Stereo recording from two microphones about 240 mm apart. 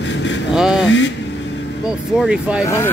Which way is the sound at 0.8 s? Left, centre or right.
Left.